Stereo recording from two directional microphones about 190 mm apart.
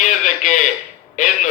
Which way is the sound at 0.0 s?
40° left (ahead or behind).